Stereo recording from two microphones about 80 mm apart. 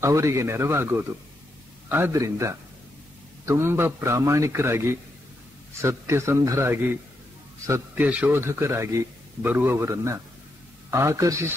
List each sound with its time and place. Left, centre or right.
0.0 s a man's voice: right
2.1 s a man's voice: right
7.9 s a man's voice: centre
8.3 s a man's voice: right
9.4 s a man's voice: right